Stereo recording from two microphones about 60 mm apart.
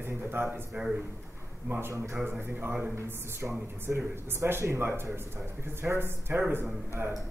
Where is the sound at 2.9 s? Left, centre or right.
Right.